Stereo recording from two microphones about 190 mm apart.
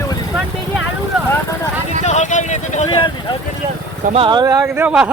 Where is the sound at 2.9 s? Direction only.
25° left (ahead or behind).